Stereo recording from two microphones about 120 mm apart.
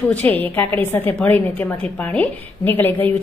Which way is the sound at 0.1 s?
15° left (ahead or behind).